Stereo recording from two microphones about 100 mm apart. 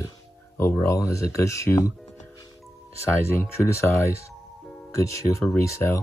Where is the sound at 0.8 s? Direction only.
30° left (ahead or behind).